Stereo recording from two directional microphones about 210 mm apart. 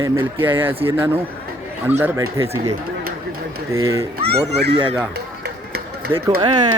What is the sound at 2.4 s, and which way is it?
Speech, 30° right (ahead or behind).